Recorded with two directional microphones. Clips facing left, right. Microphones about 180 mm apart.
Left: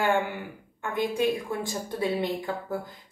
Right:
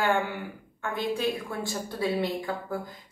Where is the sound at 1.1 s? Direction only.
20° left (ahead or behind).